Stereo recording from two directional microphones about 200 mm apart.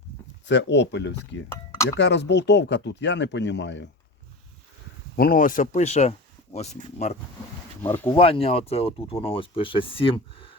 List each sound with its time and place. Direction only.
0.4 s speech: 60° left (ahead or behind)
5.1 s speech: 45° left (ahead or behind)
7.8 s speech: 10° left (ahead or behind)
8.0 s speech: 30° left (ahead or behind)